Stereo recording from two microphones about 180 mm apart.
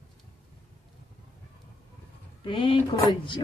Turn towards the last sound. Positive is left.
turn(degrees=30)  # may be behind; listen again after turning